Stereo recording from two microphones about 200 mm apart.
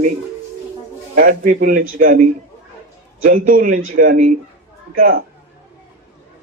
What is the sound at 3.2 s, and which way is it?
A man's voice, 45° right (ahead or behind).